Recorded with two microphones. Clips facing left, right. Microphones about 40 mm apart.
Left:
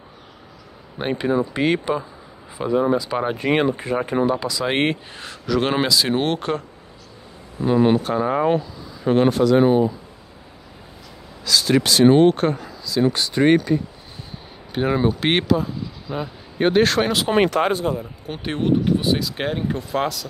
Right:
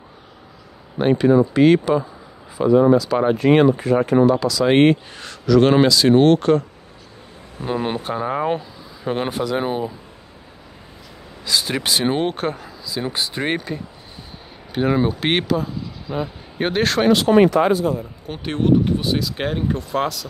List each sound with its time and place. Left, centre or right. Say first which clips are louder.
1.0 s speech: right 6 dB; centre
4.6 s speech: right 7 dB; centre
7.6 s speech: left 6 dB; centre
11.4 s speech: left 3 dB; centre
17.4 s speech: right 4 dB; left
17.9 s speech: right 1 dB; centre